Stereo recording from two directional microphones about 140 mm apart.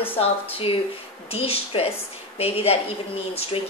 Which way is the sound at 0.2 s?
40° left (ahead or behind).